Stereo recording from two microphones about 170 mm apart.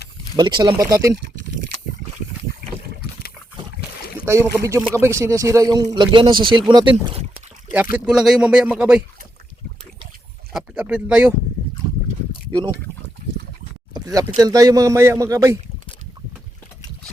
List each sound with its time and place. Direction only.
0.3 s speech: 25° right (ahead or behind)
4.3 s speech: 15° right (ahead or behind); by 7.3 s 35° right (ahead or behind)
7.9 s speech: 5° right (ahead or behind)
10.5 s speech: 5° right (ahead or behind)
13.9 s a sound: 20° right (ahead or behind)
14.3 s speech: 20° right (ahead or behind)